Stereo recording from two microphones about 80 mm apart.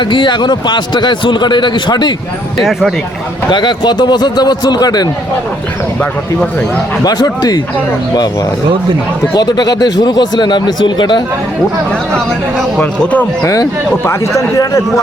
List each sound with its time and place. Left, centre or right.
0.0 s a man's voice: left
2.6 s speech: centre
3.5 s speech: left
7.0 s speech: left
9.3 s speech: left
12.8 s speech: centre
13.4 s speech: left